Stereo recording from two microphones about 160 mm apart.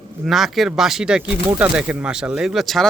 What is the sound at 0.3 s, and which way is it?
Speech, centre (ahead or behind).